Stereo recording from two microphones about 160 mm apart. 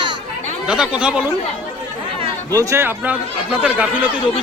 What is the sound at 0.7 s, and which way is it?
Speech, 5° right (ahead or behind).